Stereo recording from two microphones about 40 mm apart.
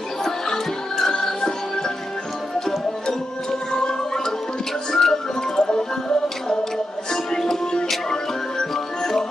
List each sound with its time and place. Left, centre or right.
0.2 s music: centre
3.7 s music: centre